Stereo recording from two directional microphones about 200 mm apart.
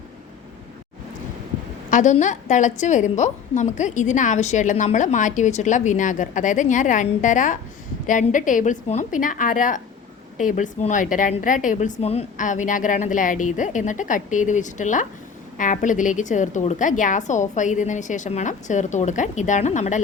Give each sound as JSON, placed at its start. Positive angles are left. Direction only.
{"t": 1.9, "sound": "a woman's voice", "side_deg": 40}